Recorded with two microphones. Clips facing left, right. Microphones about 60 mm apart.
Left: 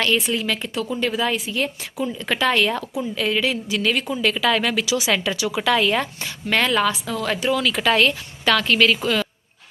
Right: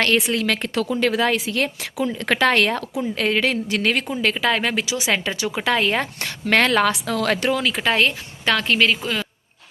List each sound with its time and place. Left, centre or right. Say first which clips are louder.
0.3 s a woman's voice: right 2 dB; right
4.1 s speech: left 1 dB; right
6.1 s a woman's voice: right 3 dB; right
6.9 s a woman's voice: right 3 dB; right
7.5 s speech: left 1 dB; right